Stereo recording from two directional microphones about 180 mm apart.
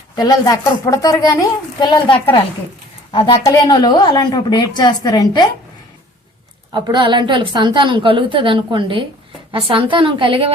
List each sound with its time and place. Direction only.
0.2 s a woman's voice: 20° left (ahead or behind)
6.7 s a woman's voice: 25° right (ahead or behind)